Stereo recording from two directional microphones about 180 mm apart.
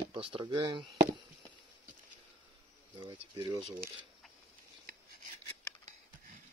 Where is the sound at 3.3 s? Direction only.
20° right (ahead or behind).